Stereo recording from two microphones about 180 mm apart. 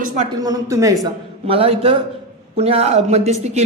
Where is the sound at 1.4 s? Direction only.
30° right (ahead or behind).